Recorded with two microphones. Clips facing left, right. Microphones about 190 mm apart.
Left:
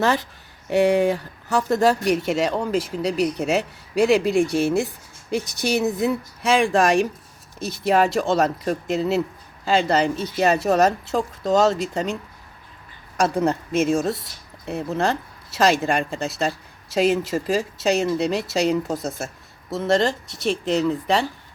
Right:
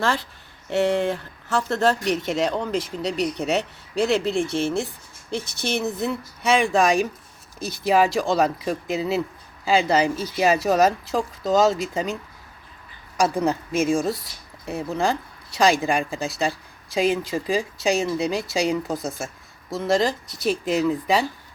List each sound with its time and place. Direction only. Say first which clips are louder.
0.0 s speech: left 3 dB; 20° left (ahead or behind)
6.5 s speech: left 1 dB; centre (ahead or behind)
13.1 s speech: left 1 dB; centre (ahead or behind)